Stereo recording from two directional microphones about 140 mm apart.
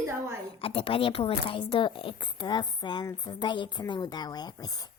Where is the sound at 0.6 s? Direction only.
40° left (ahead or behind).